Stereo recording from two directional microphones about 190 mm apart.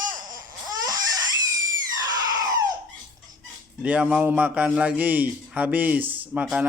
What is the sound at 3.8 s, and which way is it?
A man's voice, 10° right (ahead or behind).